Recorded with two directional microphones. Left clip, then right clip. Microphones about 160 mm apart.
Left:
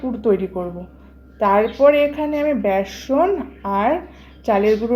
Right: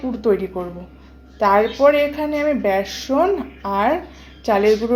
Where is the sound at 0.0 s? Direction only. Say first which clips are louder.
Even; 5° right (ahead or behind).